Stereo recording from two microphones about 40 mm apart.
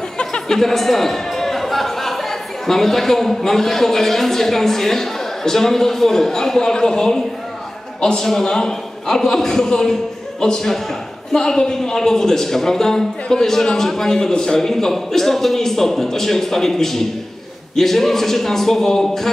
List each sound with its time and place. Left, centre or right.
0.2 s music: left
0.6 s a man's voice: centre